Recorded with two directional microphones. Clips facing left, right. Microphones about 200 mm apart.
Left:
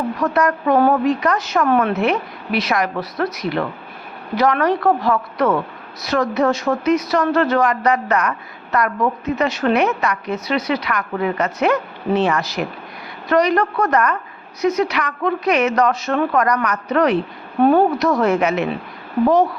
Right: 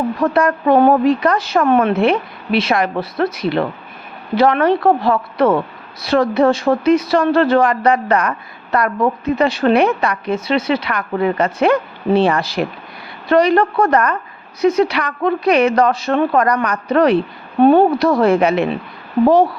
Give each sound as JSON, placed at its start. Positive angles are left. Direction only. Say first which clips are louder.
{"t": 0.2, "sound": "a woman's voice", "louder": "right 2 dB", "side_deg": -30}